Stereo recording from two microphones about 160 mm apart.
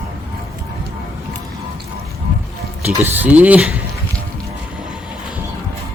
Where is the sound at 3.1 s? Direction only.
10° right (ahead or behind).